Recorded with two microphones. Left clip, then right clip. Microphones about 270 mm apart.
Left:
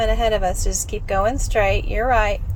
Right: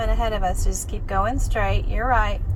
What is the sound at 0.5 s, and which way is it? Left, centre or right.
Speech, left.